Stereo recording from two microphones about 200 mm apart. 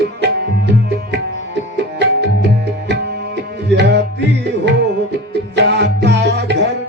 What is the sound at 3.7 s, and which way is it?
Music, 60° right (ahead or behind).